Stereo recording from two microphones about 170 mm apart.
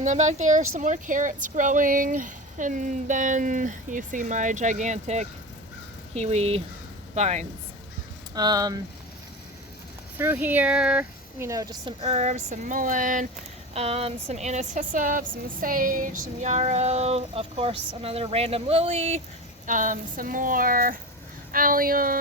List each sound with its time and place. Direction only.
0.0 s a woman's voice: 45° right (ahead or behind)
8.4 s speech: 25° right (ahead or behind)
10.2 s speech: 10° right (ahead or behind); by 13.2 s 50° right (ahead or behind)
13.7 s a woman's voice: 35° right (ahead or behind)
19.6 s speech: 50° right (ahead or behind)